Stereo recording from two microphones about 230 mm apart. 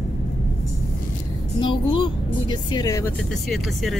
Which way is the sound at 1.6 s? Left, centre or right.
Left.